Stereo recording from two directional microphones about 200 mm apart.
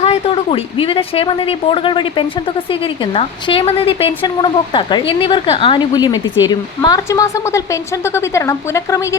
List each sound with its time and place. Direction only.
0.0 s a woman's voice: 30° left (ahead or behind); by 9.1 s 15° left (ahead or behind)